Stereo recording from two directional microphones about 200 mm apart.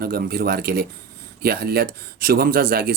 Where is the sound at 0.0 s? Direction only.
50° right (ahead or behind).